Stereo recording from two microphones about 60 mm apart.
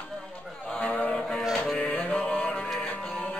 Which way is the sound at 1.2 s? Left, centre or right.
Centre.